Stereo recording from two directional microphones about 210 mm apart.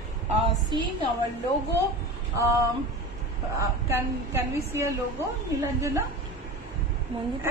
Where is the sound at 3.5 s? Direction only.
10° right (ahead or behind).